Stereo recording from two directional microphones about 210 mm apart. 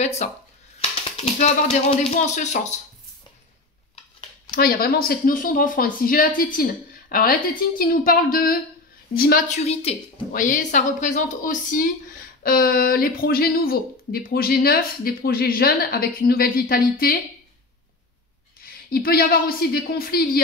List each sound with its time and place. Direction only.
0.0 s speech: 30° left (ahead or behind)
4.5 s speech: 45° left (ahead or behind)
9.7 s a woman's voice: 30° left (ahead or behind); by 17.2 s 45° left (ahead or behind)
18.7 s speech: 45° left (ahead or behind)